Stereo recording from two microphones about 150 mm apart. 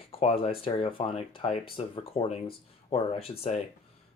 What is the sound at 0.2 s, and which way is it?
Speech, 40° left (ahead or behind).